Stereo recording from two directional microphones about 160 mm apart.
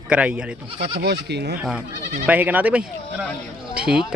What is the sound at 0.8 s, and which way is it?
Speech, 90° right.